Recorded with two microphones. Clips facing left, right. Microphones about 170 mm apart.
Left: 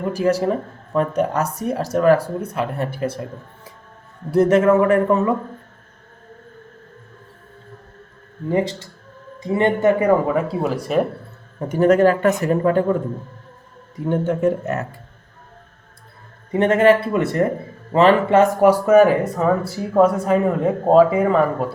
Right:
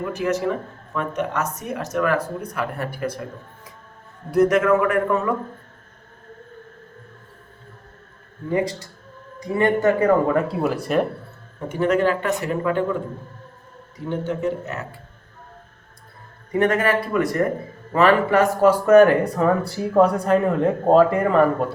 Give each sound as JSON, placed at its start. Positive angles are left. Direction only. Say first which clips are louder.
{"t": 0.1, "sound": "speech", "louder": "left 5 dB", "side_deg": 35}
{"t": 4.3, "sound": "speech", "louder": "left 3 dB", "side_deg": 30}
{"t": 8.4, "sound": "speech", "louder": "left 2 dB", "side_deg": 30}
{"t": 10.3, "sound": "speech", "louder": "left 1 dB", "side_deg": 0}
{"t": 11.7, "sound": "speech", "louder": "left 5 dB", "side_deg": 40}
{"t": 14.1, "sound": "speech", "louder": "left 5 dB", "side_deg": 50}
{"t": 16.5, "sound": "speech", "louder": "left 5 dB", "side_deg": 25}
{"t": 18.6, "sound": "speech", "louder": "right 2 dB", "side_deg": 10}